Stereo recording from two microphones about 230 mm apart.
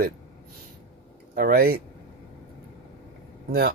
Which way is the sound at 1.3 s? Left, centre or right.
Right.